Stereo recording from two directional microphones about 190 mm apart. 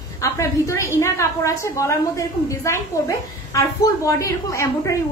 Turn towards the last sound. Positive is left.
turn(degrees=15)  # may be behind; listen again after turning